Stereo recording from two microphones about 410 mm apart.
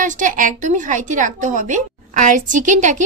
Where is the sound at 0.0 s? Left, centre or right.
Centre.